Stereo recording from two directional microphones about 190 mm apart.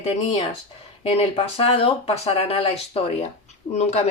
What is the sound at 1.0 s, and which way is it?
Speech, 30° left (ahead or behind).